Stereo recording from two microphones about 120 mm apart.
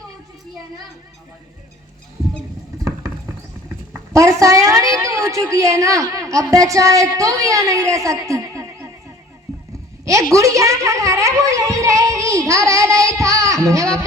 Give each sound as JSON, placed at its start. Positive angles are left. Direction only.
{"t": 3.9, "sound": "a woman's voice", "side_deg": -25}
{"t": 10.3, "sound": "a woman's voice", "side_deg": -25}